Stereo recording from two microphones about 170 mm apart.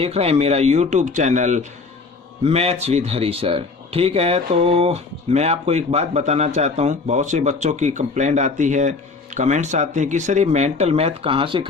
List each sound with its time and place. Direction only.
0.0 s speech: 35° right (ahead or behind)